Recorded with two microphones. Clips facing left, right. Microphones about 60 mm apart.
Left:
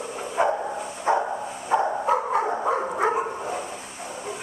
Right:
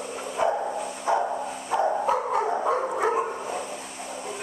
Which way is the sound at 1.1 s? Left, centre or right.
Left.